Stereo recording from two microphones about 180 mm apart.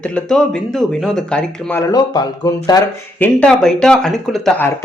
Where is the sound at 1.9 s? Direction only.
20° left (ahead or behind).